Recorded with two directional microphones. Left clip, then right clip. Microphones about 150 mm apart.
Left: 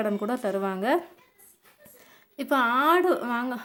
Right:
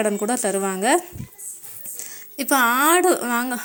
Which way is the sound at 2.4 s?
20° right (ahead or behind).